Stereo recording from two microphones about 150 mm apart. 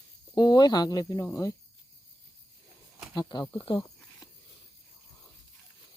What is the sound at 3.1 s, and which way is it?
Speech, 30° left (ahead or behind).